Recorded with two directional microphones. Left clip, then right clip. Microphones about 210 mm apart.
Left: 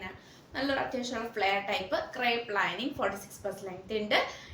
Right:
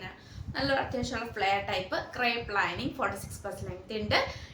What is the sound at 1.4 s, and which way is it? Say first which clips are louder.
A woman's voice: right 1 dB; 15° right (ahead or behind).